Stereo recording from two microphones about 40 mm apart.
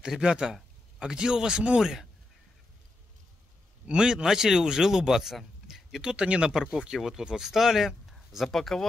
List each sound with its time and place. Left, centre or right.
0.2 s speech: centre
1.8 s speech: centre
3.8 s a man's voice: right
6.1 s speech: right
6.5 s speech: centre
8.5 s speech: centre